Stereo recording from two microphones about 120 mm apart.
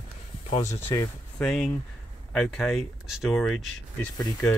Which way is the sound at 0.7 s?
20° left (ahead or behind).